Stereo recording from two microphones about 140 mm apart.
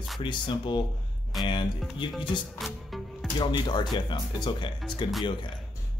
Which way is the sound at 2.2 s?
Centre (ahead or behind).